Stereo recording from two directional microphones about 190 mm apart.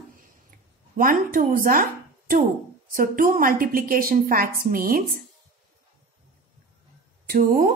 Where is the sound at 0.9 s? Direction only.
45° right (ahead or behind).